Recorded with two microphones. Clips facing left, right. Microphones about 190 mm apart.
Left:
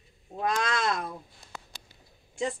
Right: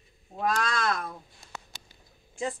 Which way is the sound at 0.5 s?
20° left (ahead or behind).